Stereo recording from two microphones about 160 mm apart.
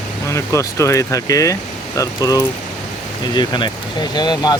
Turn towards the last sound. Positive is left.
turn(degrees=25)  # may be behind; listen again after turning